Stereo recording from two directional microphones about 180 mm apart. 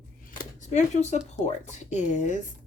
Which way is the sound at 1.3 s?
40° left (ahead or behind).